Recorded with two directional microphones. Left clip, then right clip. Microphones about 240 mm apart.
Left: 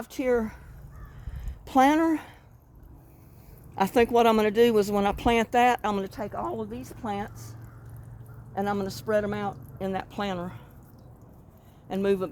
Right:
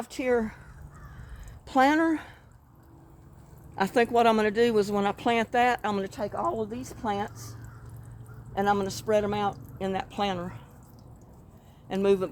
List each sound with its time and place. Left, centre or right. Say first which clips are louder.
0.0 s speech: left 1 dB; left
1.6 s a woman's voice: left 1 dB; left
3.8 s speech: left 2 dB; left; by 7.3 s centre
8.5 s speech: right 3 dB; left
11.9 s speech: right 2 dB; left